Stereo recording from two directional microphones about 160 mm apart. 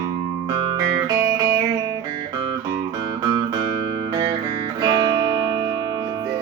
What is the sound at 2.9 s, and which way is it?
Music, 25° right (ahead or behind).